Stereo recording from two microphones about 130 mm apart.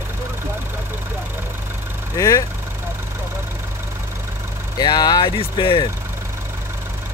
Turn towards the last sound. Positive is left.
turn(degrees=40)  # may be behind; listen again after turning